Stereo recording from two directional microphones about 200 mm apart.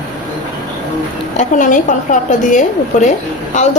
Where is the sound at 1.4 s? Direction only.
40° left (ahead or behind).